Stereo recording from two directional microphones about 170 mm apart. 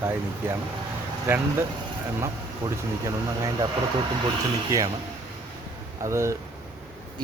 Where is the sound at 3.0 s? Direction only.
20° right (ahead or behind).